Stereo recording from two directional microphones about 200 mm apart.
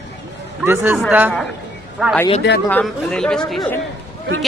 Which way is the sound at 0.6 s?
10° right (ahead or behind).